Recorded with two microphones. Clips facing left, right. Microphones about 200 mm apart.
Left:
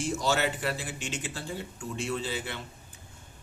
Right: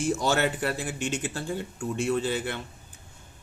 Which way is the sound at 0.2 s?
55° right (ahead or behind).